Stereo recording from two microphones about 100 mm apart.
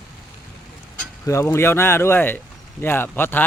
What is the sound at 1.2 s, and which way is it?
Speech, 30° left (ahead or behind).